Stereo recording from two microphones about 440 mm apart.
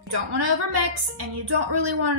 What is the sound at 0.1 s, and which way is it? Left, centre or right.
A woman's voice, right.